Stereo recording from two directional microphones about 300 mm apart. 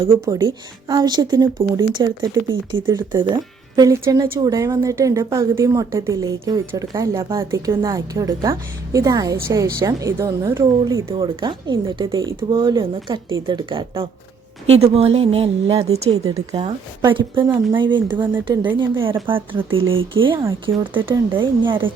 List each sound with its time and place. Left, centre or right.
0.0 s a woman's voice: centre
19.8 s speech: right
20.1 s a woman's voice: centre